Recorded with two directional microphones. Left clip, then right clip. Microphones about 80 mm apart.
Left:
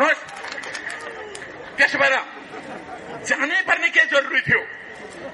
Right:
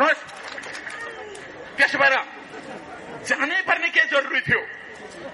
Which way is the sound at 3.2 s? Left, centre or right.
Right.